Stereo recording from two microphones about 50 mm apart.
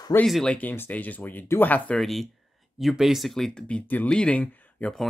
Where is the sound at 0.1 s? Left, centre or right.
Left.